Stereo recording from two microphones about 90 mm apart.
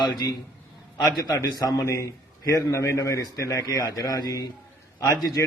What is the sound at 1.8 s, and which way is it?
A man's voice, 35° left (ahead or behind).